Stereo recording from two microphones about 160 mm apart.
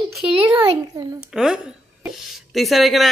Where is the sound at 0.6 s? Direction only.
25° right (ahead or behind).